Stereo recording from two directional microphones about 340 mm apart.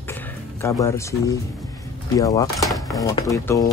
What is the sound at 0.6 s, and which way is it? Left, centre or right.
Speech, centre.